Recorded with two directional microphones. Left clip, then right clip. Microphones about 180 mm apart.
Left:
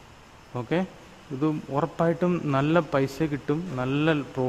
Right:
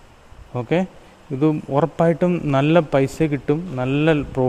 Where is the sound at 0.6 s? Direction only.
25° right (ahead or behind).